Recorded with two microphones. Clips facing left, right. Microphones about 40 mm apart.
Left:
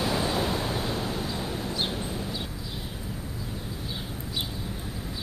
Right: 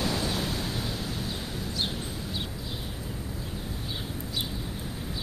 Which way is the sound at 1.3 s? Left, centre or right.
Centre.